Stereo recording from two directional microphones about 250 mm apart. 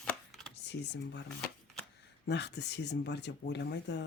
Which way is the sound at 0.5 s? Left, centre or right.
Left.